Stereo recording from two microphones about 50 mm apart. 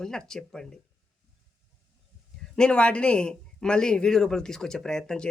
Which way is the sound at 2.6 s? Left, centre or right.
Left.